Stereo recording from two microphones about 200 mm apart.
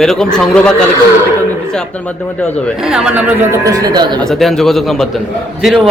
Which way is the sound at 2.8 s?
5° right (ahead or behind).